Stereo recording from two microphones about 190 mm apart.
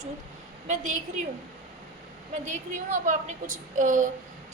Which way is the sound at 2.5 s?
40° right (ahead or behind).